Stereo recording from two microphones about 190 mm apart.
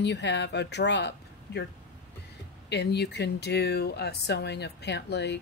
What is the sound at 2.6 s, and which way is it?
Speech, 60° left (ahead or behind).